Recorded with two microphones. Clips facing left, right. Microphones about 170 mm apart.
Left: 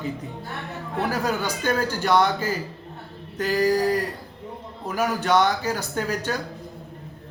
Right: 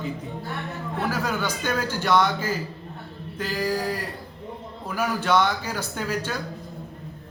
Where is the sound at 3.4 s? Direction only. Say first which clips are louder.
Left 6 dB; 40° left (ahead or behind).